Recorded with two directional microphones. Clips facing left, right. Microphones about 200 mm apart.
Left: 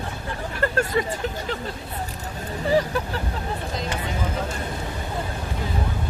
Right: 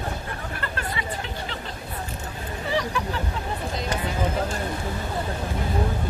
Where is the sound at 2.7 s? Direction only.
40° left (ahead or behind).